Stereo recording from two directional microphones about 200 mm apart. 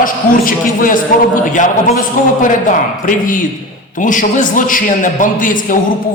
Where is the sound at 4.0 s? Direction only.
40° left (ahead or behind).